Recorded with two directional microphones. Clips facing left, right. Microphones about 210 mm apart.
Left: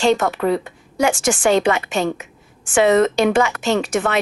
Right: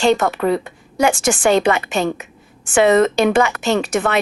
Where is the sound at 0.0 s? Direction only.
60° right (ahead or behind).